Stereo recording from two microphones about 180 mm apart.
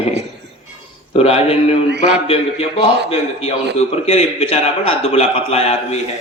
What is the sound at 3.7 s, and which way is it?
A man's voice, 35° left (ahead or behind).